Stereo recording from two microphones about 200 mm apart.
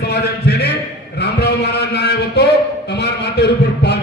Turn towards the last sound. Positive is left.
turn(degrees=55)  # may be behind; listen again after turning